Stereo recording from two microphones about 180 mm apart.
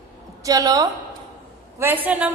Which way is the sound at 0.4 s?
20° right (ahead or behind).